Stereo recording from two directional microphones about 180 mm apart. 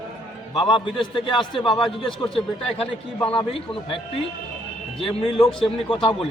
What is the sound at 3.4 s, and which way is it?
Speech, 30° left (ahead or behind).